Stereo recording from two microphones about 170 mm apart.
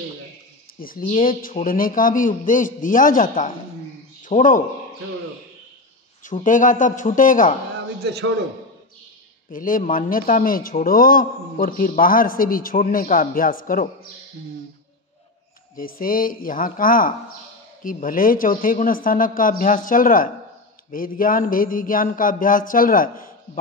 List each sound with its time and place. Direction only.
0.7 s a man's voice: 55° left (ahead or behind)
6.4 s a man's voice: 50° left (ahead or behind)
8.0 s a man's voice: 75° right (ahead or behind)
9.5 s a man's voice: 55° left (ahead or behind)
15.7 s a man's voice: 55° left (ahead or behind)